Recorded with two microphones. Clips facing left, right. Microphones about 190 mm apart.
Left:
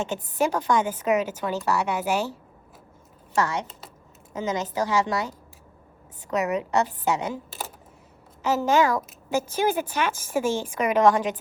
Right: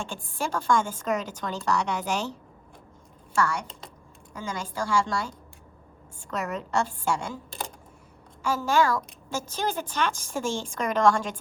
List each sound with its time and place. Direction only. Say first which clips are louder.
0.0 s a woman's voice: left 7 dB; 20° left (ahead or behind)
3.3 s a woman's voice: left 2 dB; 20° left (ahead or behind)
6.3 s a woman's voice: left 5 dB; 20° left (ahead or behind)
9.6 s a woman's voice: left 2 dB; 10° left (ahead or behind)